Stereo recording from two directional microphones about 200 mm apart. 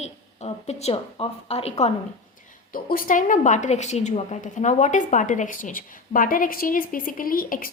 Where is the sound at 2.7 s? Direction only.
45° left (ahead or behind).